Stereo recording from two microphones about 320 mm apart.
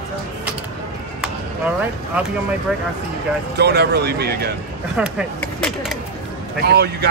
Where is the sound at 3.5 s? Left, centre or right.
Right.